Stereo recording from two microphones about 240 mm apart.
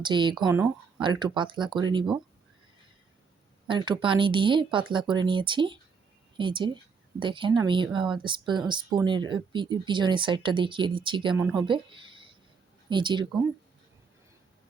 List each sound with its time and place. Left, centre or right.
0.0 s speech: centre
1.0 s speech: centre
3.7 s a woman's voice: centre